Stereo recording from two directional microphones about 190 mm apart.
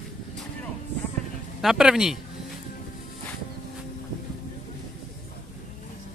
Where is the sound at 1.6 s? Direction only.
Centre (ahead or behind).